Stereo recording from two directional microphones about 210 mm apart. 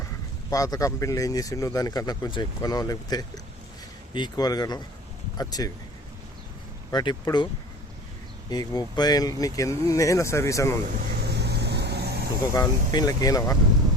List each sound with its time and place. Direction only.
0.5 s speech: 15° left (ahead or behind)
6.9 s speech: 20° left (ahead or behind)
8.4 s speech: 20° left (ahead or behind)
11.1 s vehicle: 50° right (ahead or behind)
12.5 s speech: 20° left (ahead or behind)